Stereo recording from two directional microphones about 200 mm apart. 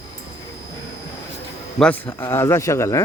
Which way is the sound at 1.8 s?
5° left (ahead or behind).